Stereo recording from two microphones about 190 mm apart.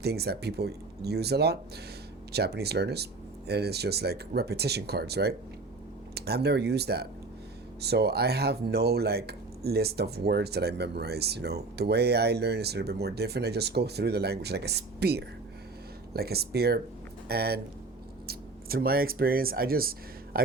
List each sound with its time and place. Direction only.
0.0 s speech: 55° right (ahead or behind)